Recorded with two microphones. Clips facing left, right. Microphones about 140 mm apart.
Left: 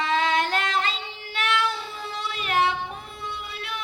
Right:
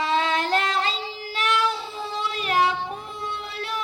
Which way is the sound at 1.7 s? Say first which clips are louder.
Right 3 dB; 25° right (ahead or behind).